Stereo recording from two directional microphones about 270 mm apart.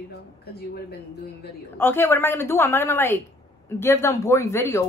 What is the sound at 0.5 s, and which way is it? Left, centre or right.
Speech, left.